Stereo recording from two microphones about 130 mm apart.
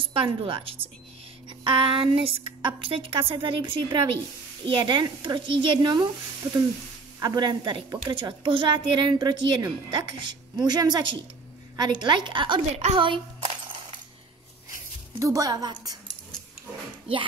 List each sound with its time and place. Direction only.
0.0 s a woman's voice: 45° right (ahead or behind)
6.4 s a sound: 15° right (ahead or behind)
7.2 s a woman's voice: 35° right (ahead or behind)
15.1 s a woman's voice: 25° right (ahead or behind)